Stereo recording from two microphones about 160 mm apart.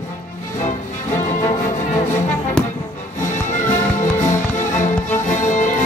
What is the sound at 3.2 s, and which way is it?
Music, 50° left (ahead or behind).